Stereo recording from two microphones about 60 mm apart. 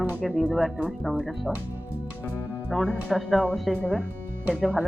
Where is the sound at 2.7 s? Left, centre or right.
Centre.